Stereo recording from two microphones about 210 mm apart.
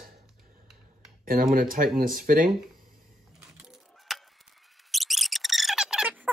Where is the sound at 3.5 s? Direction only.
Centre (ahead or behind).